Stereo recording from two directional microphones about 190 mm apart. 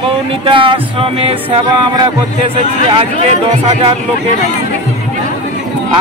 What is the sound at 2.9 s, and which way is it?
Speech, 30° right (ahead or behind).